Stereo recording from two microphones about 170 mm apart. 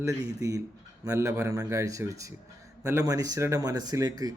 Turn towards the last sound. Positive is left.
turn(degrees=-20)  # may be behind; listen again after turning